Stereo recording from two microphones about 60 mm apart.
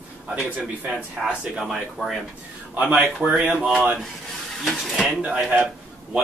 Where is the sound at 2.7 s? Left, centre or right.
Right.